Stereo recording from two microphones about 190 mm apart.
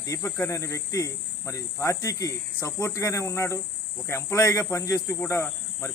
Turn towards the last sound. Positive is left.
turn(degrees=15)  # may be behind; listen again after turning